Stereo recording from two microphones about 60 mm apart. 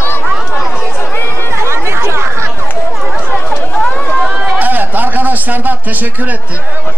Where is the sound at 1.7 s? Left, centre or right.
Right.